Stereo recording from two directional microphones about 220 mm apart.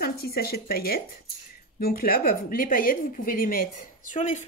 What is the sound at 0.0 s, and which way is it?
Speech, 45° left (ahead or behind).